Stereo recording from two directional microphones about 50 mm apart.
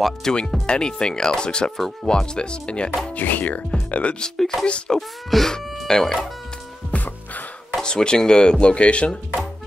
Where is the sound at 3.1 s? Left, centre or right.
Left.